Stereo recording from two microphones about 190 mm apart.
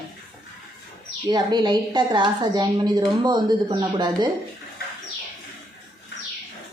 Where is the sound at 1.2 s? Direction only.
25° right (ahead or behind).